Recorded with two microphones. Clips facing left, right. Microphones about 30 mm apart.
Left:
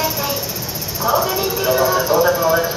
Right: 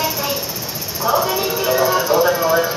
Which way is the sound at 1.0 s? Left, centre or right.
Right.